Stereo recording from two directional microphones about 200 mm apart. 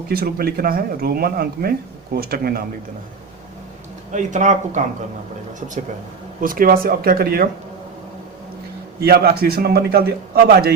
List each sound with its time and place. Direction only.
0.1 s a man's voice: 50° right (ahead or behind)
4.1 s a man's voice: 35° right (ahead or behind)
9.0 s a man's voice: 50° right (ahead or behind)